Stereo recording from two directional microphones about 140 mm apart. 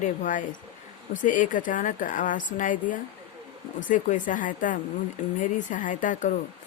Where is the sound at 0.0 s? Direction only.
65° left (ahead or behind).